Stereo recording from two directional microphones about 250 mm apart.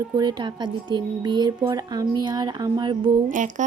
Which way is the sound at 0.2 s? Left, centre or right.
Centre.